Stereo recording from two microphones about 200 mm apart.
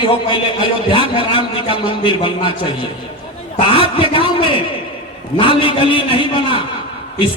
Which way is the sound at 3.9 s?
25° left (ahead or behind).